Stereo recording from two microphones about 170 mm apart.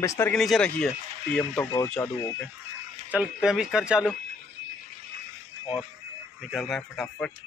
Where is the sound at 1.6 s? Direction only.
20° left (ahead or behind).